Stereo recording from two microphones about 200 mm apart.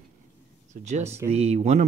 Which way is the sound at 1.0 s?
10° right (ahead or behind).